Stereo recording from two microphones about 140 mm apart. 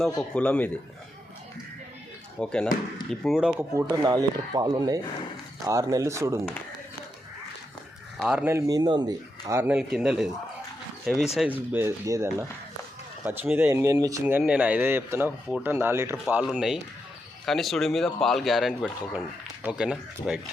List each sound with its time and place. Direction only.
0.2 s a man's voice: 10° left (ahead or behind)
2.4 s a man's voice: 5° left (ahead or behind)
3.8 s speech: 25° right (ahead or behind)
8.2 s speech: 5° right (ahead or behind)
8.4 s speech: 25° right (ahead or behind)
9.6 s speech: 10° right (ahead or behind)
11.4 s speech: centre (ahead or behind)
11.7 s speech: 20° right (ahead or behind)
16.3 s speech: 5° right (ahead or behind)